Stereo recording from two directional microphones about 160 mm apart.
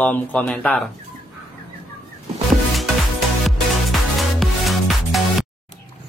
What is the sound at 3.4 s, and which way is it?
Music, centre (ahead or behind).